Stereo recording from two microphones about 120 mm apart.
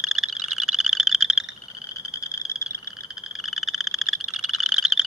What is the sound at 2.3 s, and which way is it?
Frog, 25° left (ahead or behind).